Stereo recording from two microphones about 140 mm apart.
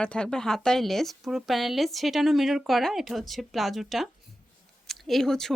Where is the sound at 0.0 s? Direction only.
5° left (ahead or behind).